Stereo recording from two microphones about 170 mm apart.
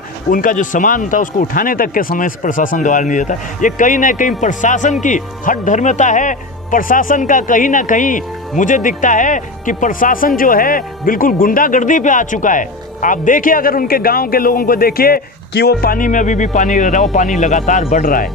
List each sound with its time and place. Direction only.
0.3 s speech: 55° left (ahead or behind)